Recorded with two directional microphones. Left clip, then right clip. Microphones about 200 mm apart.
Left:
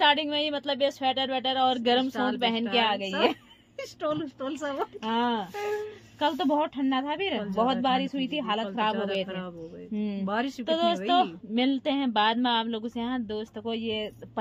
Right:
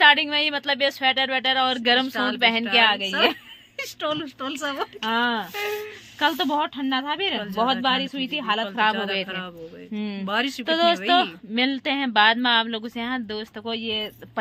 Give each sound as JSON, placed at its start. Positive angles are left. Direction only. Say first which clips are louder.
{"t": 0.0, "sound": "speech", "louder": "right 7 dB", "side_deg": -10}
{"t": 3.7, "sound": "speech", "louder": "right 3 dB", "side_deg": 10}
{"t": 5.0, "sound": "speech", "louder": "right 5 dB", "side_deg": -5}
{"t": 9.9, "sound": "speech", "louder": "right 2 dB", "side_deg": -5}
{"t": 10.2, "sound": "speech", "louder": "right 6 dB", "side_deg": 25}
{"t": 10.6, "sound": "speech", "louder": "right 6 dB", "side_deg": -10}